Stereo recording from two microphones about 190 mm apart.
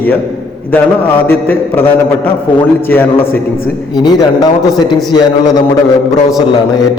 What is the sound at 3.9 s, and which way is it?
A man's voice, 20° left (ahead or behind).